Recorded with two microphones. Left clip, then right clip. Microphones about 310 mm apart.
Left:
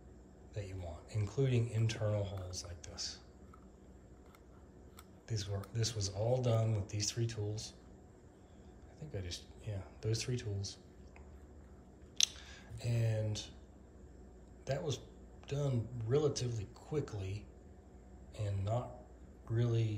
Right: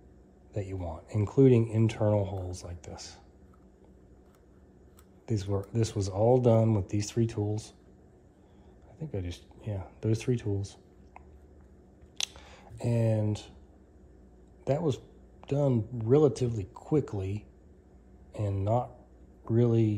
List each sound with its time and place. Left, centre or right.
0.5 s speech: centre
5.2 s speech: centre
9.0 s speech: right
12.2 s a sound: centre
14.6 s speech: right